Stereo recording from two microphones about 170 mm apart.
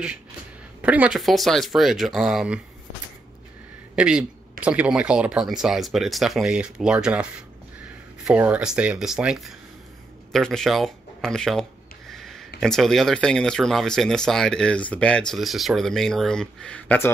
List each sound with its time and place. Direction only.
0.8 s speech: 10° right (ahead or behind)
3.9 s speech: 5° right (ahead or behind)
12.1 s a sound: centre (ahead or behind)
12.5 s speech: centre (ahead or behind)